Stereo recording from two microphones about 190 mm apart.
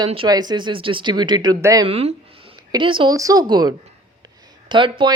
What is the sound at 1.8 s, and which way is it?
Speech, 30° right (ahead or behind).